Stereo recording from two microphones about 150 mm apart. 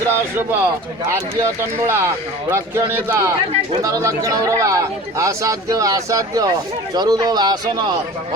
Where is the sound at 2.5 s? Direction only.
20° right (ahead or behind).